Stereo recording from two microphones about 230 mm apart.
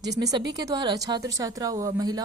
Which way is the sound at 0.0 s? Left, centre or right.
Centre.